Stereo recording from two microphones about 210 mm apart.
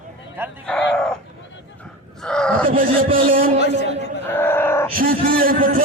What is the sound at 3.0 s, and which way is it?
Speech, 45° right (ahead or behind).